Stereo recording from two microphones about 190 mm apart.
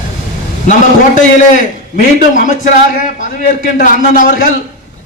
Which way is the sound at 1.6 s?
45° left (ahead or behind).